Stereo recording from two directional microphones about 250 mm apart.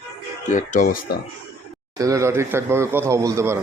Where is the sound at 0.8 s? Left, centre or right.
Left.